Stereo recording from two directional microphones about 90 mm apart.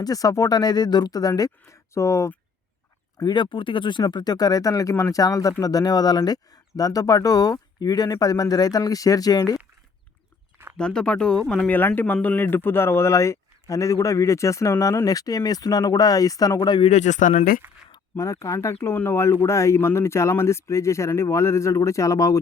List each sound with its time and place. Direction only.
0.0 s speech: 40° left (ahead or behind)
3.2 s speech: 60° left (ahead or behind); by 9.6 s 45° left (ahead or behind)
10.8 s speech: 10° left (ahead or behind)
11.7 s speech: 20° left (ahead or behind); by 16.6 s 40° left (ahead or behind)
18.2 s speech: 35° left (ahead or behind)